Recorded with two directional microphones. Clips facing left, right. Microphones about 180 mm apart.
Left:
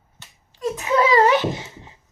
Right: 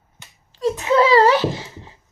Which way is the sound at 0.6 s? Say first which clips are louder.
Right 3 dB; 30° right (ahead or behind).